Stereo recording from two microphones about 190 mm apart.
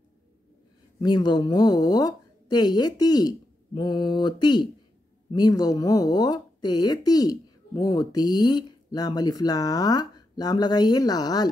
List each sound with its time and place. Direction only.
1.0 s speech: 20° left (ahead or behind)